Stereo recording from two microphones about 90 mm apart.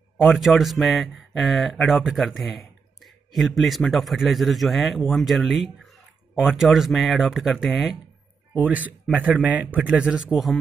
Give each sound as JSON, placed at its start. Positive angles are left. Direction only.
{"t": 0.4, "sound": "speech", "side_deg": 0}
{"t": 8.5, "sound": "a man's voice", "side_deg": -20}